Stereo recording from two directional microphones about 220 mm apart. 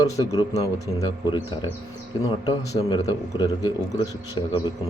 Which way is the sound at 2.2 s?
15° left (ahead or behind).